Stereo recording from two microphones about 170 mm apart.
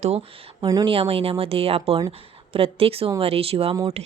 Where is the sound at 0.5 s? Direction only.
20° right (ahead or behind).